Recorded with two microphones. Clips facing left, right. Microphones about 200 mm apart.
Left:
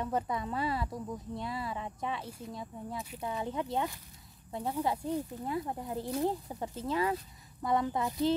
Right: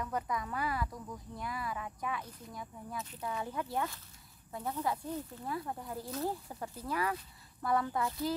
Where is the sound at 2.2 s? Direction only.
10° left (ahead or behind).